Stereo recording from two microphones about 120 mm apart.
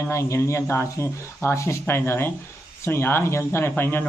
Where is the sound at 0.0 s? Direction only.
25° left (ahead or behind).